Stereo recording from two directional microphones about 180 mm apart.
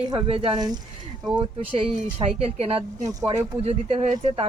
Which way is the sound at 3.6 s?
35° right (ahead or behind).